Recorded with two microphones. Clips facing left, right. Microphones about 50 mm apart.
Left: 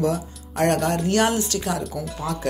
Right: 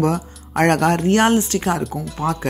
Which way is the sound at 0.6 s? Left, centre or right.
Right.